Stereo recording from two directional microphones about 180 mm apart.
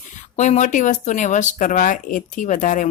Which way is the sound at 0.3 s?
40° left (ahead or behind).